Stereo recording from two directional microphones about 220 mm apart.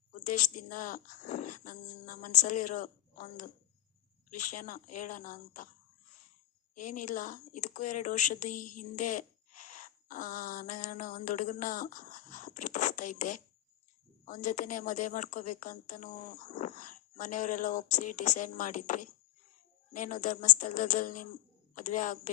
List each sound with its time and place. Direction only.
0.1 s a woman's voice: 35° left (ahead or behind)
6.7 s a woman's voice: 35° left (ahead or behind)